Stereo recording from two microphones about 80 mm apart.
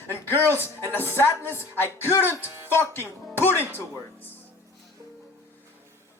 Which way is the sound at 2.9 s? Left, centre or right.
Left.